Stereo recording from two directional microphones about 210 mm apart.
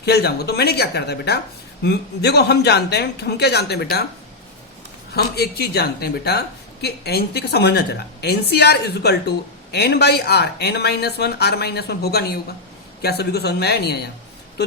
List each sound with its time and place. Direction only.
0.0 s speech: 50° left (ahead or behind)
5.1 s speech: 50° left (ahead or behind)